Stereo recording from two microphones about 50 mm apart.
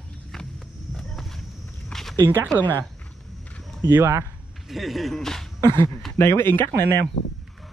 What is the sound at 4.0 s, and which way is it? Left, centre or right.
Speech, right.